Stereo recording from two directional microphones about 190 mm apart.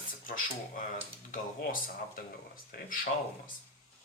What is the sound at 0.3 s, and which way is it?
Speech, 45° left (ahead or behind).